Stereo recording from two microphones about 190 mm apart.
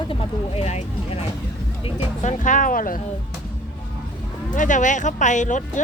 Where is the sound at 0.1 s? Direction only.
30° left (ahead or behind); by 3.0 s 45° left (ahead or behind).